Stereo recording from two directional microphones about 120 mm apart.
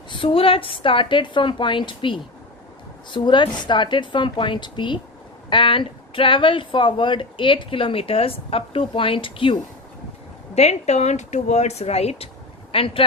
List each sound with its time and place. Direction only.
0.1 s a woman's voice: 45° left (ahead or behind)
10.5 s speech: 65° left (ahead or behind); by 13.1 s 50° left (ahead or behind)